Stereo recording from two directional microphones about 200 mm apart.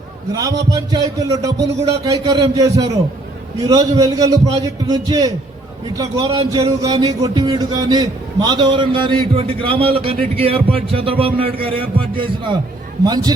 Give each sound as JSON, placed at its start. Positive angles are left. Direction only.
{"t": 0.3, "sound": "a man's voice", "side_deg": -15}